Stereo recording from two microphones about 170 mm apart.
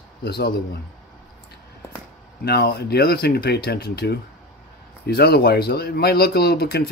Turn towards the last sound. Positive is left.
turn(degrees=70)  # may be behind; listen again after turning